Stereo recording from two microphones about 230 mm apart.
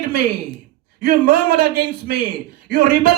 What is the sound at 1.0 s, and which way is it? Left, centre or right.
A man's voice, right.